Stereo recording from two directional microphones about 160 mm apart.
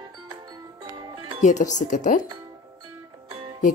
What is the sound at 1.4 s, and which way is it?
Speech, 50° left (ahead or behind).